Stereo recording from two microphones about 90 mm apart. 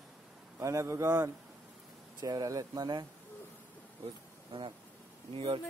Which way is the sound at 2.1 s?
45° right (ahead or behind).